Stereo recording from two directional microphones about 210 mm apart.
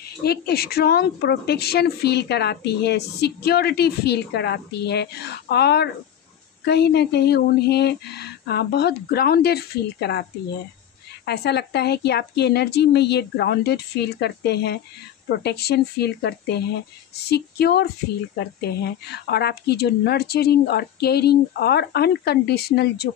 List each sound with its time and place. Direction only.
0.2 s a woman's voice: 50° left (ahead or behind)
11.2 s a woman's voice: 50° left (ahead or behind)